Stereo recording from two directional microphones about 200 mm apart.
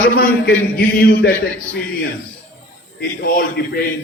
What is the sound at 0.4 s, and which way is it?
Speech, 50° left (ahead or behind).